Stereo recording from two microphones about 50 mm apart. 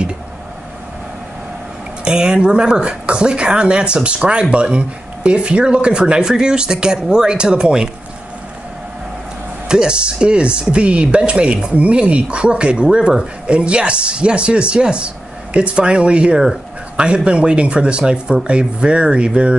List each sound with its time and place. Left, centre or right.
2.0 s speech: centre
9.7 s speech: centre
16.3 s a sound: centre
17.0 s speech: right